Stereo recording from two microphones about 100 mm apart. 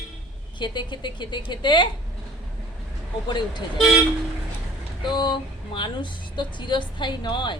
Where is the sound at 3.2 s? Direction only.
50° left (ahead or behind).